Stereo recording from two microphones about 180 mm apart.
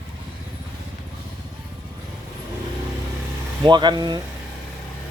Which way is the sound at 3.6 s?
25° right (ahead or behind).